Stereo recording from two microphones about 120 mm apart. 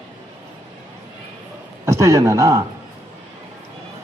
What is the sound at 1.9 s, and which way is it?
Speech, 25° right (ahead or behind).